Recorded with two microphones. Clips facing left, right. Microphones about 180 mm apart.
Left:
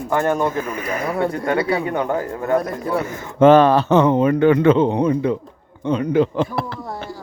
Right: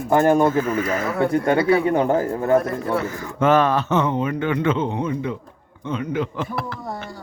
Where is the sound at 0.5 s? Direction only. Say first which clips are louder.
Right 3 dB; 15° left (ahead or behind).